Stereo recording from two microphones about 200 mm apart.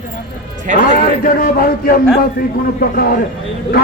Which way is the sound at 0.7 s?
45° left (ahead or behind).